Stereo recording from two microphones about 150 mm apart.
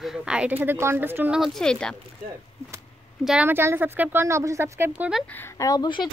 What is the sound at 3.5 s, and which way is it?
Speech, 15° right (ahead or behind).